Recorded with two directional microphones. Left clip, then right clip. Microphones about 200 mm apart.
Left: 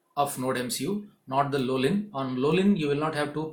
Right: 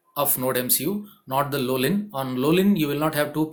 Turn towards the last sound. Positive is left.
turn(degrees=-50)  # may be behind; listen again after turning